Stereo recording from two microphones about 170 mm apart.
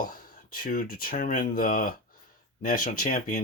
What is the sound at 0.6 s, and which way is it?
Speech, 55° left (ahead or behind).